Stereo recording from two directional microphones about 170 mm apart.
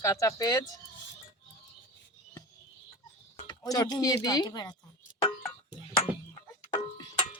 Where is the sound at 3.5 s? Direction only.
20° left (ahead or behind).